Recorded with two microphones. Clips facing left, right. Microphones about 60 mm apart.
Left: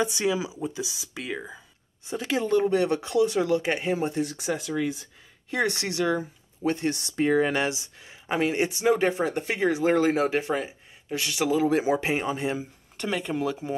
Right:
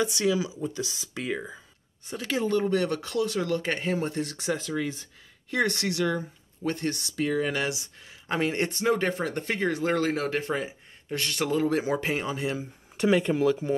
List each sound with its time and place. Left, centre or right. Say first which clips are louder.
0.0 s speech: even; left; by 1.6 s centre
2.0 s speech: left 2 dB; centre
5.5 s speech: even; centre
7.0 s speech: left 5 dB; left
8.4 s speech: left 2 dB; centre
10.5 s speech: left 2 dB; centre; by 12.6 s left
12.9 s speech: right 6 dB; centre